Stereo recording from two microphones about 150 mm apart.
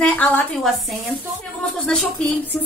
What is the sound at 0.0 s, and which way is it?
A woman's voice, 5° left (ahead or behind).